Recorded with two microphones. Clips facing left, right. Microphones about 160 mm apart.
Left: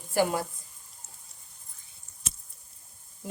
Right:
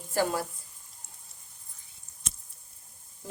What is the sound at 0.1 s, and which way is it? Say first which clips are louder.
Speech: left 2 dB; 15° left (ahead or behind).